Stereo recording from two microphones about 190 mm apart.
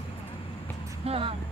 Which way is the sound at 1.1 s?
30° right (ahead or behind).